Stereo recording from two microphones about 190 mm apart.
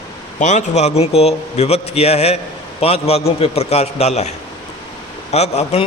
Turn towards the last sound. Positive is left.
turn(degrees=35)  # may be behind; listen again after turning